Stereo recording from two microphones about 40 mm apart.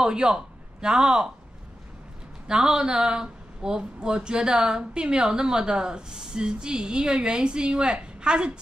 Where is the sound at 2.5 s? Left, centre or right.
Centre.